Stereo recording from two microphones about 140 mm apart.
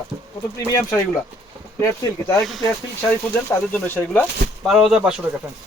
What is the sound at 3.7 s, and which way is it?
Speech, 10° left (ahead or behind).